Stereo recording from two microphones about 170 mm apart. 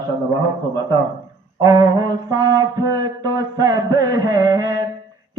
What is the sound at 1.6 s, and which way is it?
Mantra, 20° right (ahead or behind).